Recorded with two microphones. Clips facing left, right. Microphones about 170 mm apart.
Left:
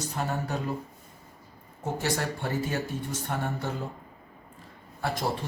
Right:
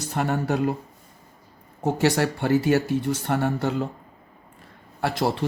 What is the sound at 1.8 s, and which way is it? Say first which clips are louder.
Speech: right 8 dB; 80° right.